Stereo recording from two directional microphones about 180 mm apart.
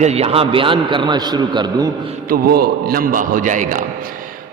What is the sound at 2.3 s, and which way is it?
A man's voice, 60° right (ahead or behind).